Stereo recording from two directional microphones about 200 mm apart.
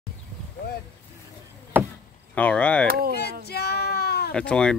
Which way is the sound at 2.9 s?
50° right (ahead or behind).